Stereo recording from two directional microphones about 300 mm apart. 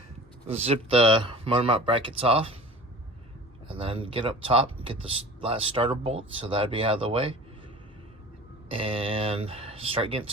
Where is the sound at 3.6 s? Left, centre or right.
Centre.